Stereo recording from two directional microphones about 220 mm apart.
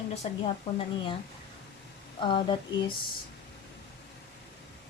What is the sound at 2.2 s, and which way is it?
Speech, 20° left (ahead or behind).